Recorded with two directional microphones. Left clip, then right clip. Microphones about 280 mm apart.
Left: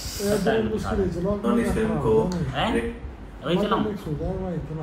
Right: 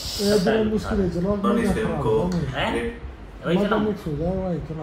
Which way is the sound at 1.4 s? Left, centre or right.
Centre.